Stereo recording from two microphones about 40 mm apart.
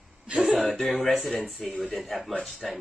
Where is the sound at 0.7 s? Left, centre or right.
Centre.